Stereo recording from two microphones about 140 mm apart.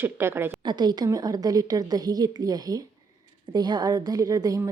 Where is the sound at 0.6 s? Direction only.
30° right (ahead or behind).